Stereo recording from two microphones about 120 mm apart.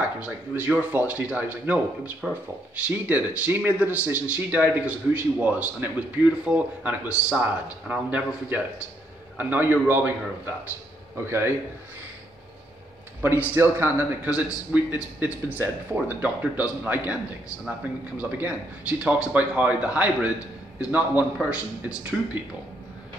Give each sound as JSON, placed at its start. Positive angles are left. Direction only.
{"t": 0.2, "sound": "a man's voice", "side_deg": -10}
{"t": 13.2, "sound": "a man's voice", "side_deg": -15}